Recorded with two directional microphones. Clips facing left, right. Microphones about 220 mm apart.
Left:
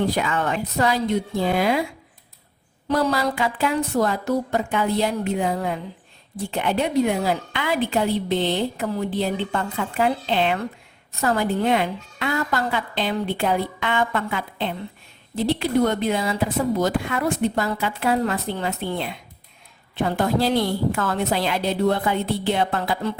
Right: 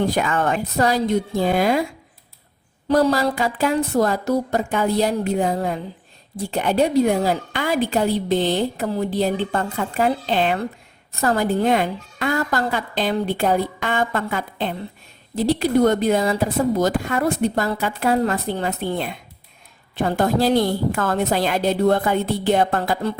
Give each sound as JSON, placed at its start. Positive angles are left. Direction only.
{"t": 0.0, "sound": "speech", "side_deg": -45}
{"t": 2.9, "sound": "a woman's voice", "side_deg": -40}